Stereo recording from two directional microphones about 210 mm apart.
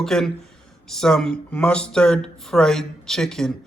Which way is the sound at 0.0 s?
Centre (ahead or behind).